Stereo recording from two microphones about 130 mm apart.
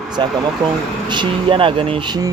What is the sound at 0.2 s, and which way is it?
Speech, 40° right (ahead or behind).